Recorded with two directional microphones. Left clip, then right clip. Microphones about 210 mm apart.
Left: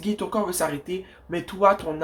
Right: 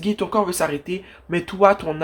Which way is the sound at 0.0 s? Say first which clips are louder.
Right 5 dB; 35° right (ahead or behind).